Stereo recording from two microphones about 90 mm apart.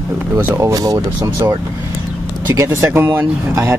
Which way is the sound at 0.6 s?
40° right (ahead or behind).